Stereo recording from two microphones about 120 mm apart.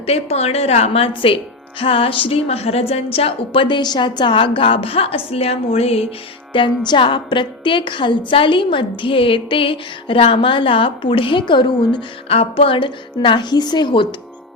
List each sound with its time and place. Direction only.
0.0 s a woman's voice: 60° left (ahead or behind)
6.5 s a woman's voice: 45° left (ahead or behind)